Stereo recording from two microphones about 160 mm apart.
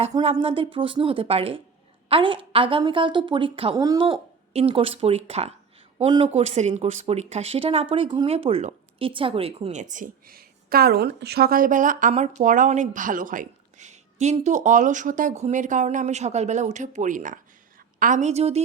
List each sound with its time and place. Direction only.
0.1 s speech: 30° right (ahead or behind)
3.8 s a woman's voice: 25° right (ahead or behind)
4.0 s speech: 35° right (ahead or behind)
9.8 s speech: 55° right (ahead or behind)